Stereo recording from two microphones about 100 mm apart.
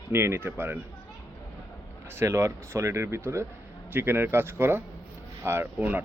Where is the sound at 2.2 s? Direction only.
30° right (ahead or behind).